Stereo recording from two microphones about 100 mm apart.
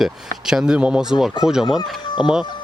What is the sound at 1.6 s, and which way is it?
Speech, 45° left (ahead or behind).